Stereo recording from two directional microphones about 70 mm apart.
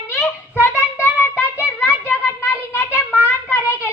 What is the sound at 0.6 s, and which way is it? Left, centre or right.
Child singing, left.